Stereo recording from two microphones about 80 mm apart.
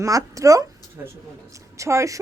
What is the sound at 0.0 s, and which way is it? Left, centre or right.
Speech, right.